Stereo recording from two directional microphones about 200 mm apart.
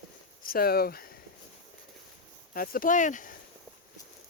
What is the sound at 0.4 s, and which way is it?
Speech, 50° left (ahead or behind).